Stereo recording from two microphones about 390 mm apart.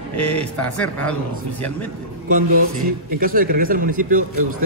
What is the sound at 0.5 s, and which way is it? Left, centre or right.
Speech, centre.